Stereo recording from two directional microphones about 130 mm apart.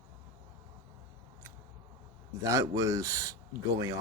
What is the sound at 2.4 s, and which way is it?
Speech, 25° right (ahead or behind).